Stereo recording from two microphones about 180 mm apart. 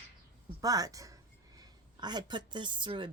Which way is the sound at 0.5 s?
20° right (ahead or behind).